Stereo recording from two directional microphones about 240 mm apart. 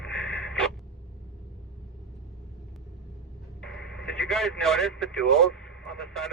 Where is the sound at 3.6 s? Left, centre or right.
Centre.